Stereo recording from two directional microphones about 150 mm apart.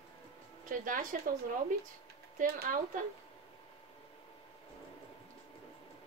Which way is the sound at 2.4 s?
75° right (ahead or behind).